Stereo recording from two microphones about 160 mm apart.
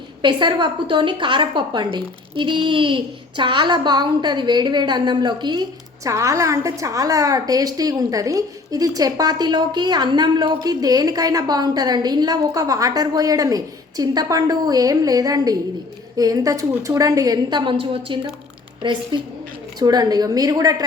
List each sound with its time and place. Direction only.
0.2 s a woman's voice: 30° right (ahead or behind)